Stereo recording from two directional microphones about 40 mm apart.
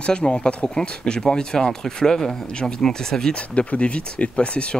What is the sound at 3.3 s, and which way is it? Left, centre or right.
Speech, left.